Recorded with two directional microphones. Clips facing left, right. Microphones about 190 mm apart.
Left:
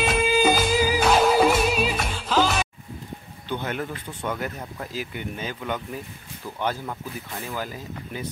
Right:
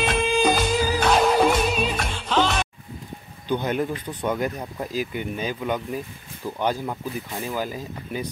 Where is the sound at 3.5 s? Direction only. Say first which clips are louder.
Right 5 dB; 15° right (ahead or behind).